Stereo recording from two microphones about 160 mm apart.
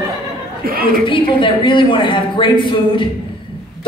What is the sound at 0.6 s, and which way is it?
Speech, 65° right (ahead or behind).